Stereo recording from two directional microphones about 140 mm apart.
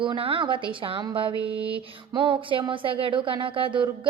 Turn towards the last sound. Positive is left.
turn(degrees=-35)  # may be behind; listen again after turning